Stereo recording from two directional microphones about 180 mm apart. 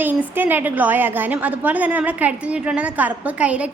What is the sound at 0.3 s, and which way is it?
A woman's voice, 10° right (ahead or behind).